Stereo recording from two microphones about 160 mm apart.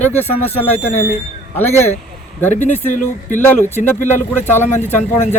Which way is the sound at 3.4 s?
15° left (ahead or behind).